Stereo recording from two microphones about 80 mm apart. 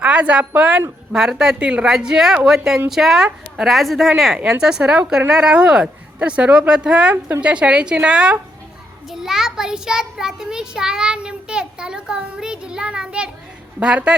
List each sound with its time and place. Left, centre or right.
0.0 s a woman's voice: centre